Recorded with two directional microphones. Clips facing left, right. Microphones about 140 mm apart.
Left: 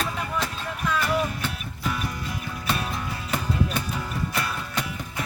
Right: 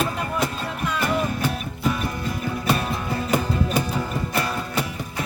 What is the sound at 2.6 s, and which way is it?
Music, 40° right (ahead or behind).